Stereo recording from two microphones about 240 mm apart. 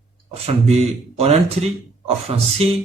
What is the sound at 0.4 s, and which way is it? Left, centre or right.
Speech, right.